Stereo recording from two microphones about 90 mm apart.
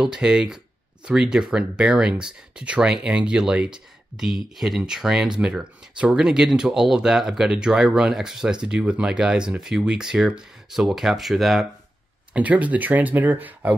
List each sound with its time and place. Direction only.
0.0 s speech: 10° right (ahead or behind)
12.4 s speech: 15° right (ahead or behind)